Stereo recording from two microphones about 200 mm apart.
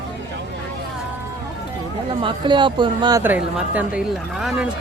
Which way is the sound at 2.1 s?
25° right (ahead or behind).